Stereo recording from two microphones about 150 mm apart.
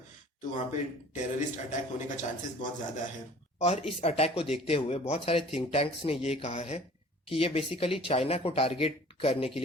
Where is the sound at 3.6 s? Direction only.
45° left (ahead or behind).